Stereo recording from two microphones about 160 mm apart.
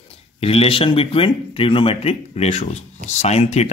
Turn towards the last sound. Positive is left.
turn(degrees=40)  # may be behind; listen again after turning